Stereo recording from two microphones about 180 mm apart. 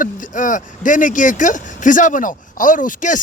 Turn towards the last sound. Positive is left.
turn(degrees=45)  # may be behind; listen again after turning